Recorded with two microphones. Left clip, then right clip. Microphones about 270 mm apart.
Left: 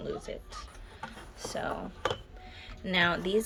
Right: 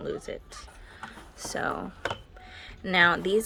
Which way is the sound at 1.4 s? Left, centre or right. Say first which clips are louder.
Right 4 dB; centre.